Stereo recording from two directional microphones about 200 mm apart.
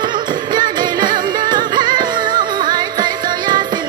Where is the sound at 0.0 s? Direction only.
20° right (ahead or behind).